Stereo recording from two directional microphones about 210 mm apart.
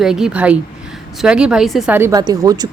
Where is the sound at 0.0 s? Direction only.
5° right (ahead or behind).